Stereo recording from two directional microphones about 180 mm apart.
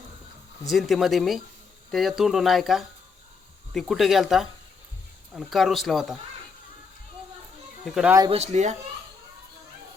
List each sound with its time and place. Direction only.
0.7 s speech: centre (ahead or behind)
7.9 s speech: centre (ahead or behind)
8.3 s speech: 40° right (ahead or behind)